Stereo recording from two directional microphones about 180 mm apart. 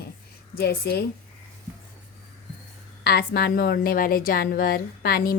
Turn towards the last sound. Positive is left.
turn(degrees=60)  # may be behind; listen again after turning